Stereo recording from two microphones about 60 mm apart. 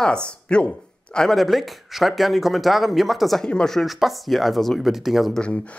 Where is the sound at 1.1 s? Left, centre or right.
Centre.